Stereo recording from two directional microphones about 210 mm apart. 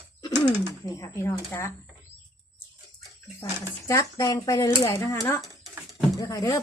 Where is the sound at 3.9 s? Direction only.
15° left (ahead or behind).